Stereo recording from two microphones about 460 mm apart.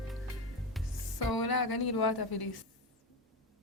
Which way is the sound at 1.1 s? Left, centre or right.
Left.